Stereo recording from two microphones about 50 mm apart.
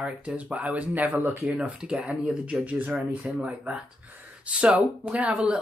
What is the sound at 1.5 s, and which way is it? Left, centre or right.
Speech, centre.